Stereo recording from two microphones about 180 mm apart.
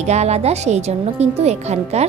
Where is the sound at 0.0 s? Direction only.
35° right (ahead or behind).